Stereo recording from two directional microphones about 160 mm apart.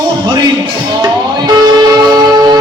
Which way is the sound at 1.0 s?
25° right (ahead or behind).